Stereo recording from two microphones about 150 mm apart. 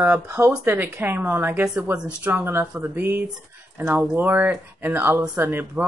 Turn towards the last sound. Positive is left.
turn(degrees=-10)  # may be behind; listen again after turning